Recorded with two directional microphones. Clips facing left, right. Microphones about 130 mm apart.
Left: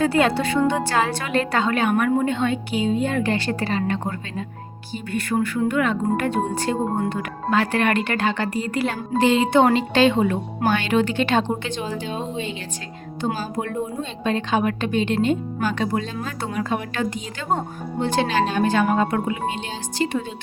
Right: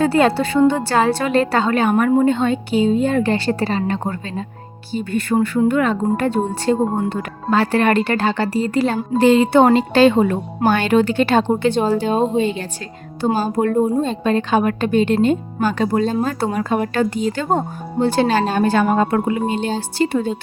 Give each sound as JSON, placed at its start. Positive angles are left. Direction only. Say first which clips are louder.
{"t": 0.0, "sound": "a woman's voice", "louder": "right 4 dB", "side_deg": -35}